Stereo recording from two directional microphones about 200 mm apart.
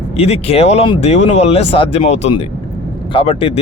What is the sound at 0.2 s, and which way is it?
Speech, 30° left (ahead or behind).